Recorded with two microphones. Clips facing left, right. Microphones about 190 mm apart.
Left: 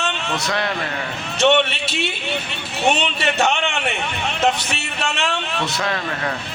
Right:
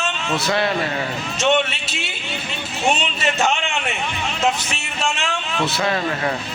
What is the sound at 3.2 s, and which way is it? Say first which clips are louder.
A man's voice: left 1 dB; 65° left (ahead or behind).